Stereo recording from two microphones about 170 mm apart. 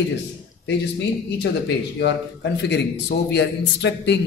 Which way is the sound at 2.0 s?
90° left.